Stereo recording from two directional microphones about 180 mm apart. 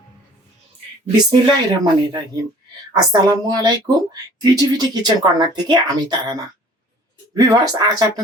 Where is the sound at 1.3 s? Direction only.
20° right (ahead or behind).